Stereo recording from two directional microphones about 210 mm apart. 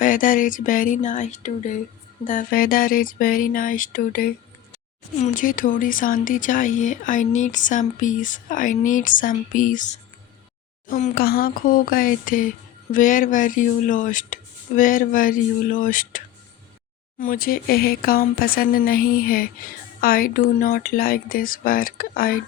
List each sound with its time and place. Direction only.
0.0 s a woman's voice: 40° left (ahead or behind)